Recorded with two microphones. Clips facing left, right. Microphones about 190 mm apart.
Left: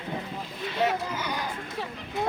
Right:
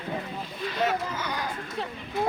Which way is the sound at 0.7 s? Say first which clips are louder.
Left 1 dB; 15° left (ahead or behind).